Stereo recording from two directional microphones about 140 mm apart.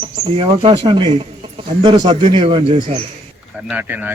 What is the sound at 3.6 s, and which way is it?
Speech, 10° right (ahead or behind).